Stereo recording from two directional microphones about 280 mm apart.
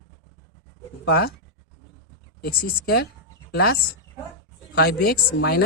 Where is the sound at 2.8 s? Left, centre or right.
Left.